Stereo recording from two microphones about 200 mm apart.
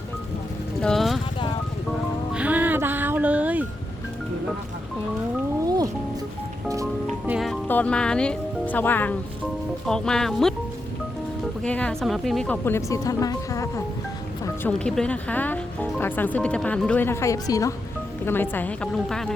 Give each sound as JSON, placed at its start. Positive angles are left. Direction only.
{"t": 0.8, "sound": "vehicle", "side_deg": 0}
{"t": 2.3, "sound": "music", "side_deg": -5}
{"t": 5.6, "sound": "music", "side_deg": -20}
{"t": 7.3, "sound": "speech", "side_deg": 0}
{"t": 11.6, "sound": "speech", "side_deg": 5}